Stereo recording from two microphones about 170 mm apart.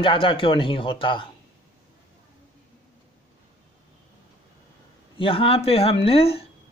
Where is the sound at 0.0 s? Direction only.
30° left (ahead or behind).